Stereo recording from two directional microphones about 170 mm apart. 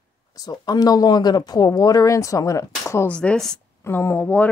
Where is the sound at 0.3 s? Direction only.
20° left (ahead or behind); by 3.5 s 5° left (ahead or behind).